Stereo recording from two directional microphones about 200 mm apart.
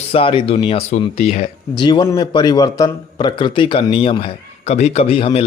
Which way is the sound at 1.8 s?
20° left (ahead or behind).